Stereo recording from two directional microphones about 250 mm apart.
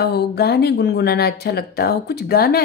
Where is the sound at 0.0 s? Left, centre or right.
Left.